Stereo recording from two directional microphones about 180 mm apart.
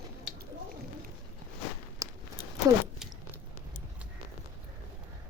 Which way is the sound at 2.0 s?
20° right (ahead or behind).